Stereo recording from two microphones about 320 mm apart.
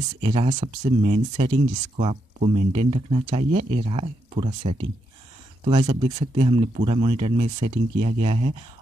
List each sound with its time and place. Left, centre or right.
0.2 s speech: centre